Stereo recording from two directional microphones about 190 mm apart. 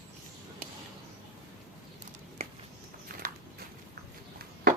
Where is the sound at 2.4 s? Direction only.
35° right (ahead or behind).